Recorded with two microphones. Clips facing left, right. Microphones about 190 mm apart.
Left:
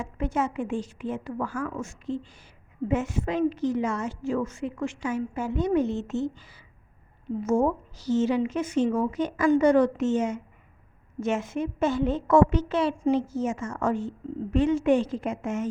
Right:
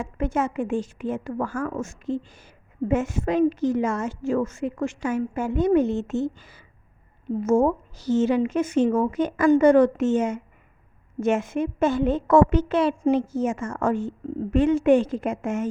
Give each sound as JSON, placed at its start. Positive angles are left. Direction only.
{"t": 0.0, "sound": "a woman's voice", "side_deg": -50}